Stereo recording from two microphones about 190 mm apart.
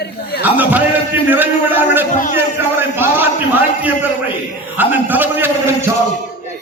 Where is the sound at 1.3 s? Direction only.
10° right (ahead or behind).